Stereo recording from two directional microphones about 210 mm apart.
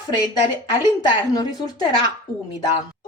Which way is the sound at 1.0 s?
20° left (ahead or behind).